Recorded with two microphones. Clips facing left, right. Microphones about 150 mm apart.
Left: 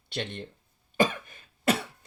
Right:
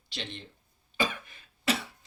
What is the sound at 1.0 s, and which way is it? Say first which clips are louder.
Cough: left 6 dB; 50° left (ahead or behind).